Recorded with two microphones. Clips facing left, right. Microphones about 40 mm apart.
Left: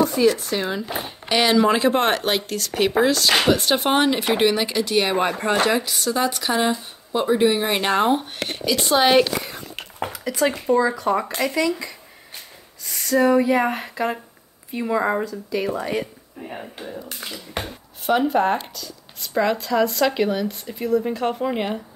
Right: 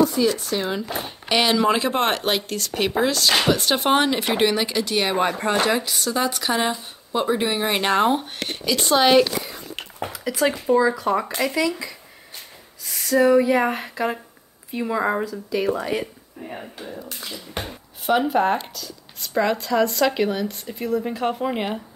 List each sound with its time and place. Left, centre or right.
0.4 s speech: centre
10.1 s speech: centre
17.2 s speech: left
17.6 s speech: centre